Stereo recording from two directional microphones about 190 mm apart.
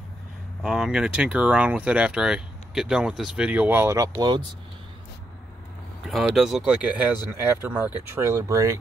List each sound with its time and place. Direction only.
0.6 s speech: 5° right (ahead or behind); by 4.4 s 20° right (ahead or behind)
6.0 s speech: centre (ahead or behind)